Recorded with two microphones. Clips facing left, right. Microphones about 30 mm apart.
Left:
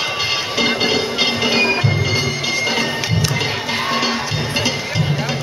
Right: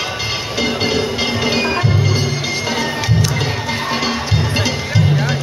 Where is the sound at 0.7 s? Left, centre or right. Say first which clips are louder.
Even; centre.